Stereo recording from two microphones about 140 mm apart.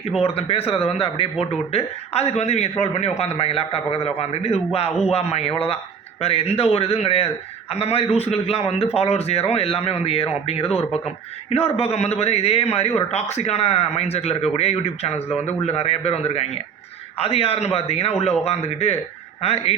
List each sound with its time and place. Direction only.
0.2 s a man's voice: 45° left (ahead or behind)